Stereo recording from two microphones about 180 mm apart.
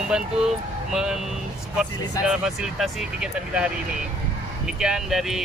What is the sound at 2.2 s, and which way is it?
Speech, 5° right (ahead or behind).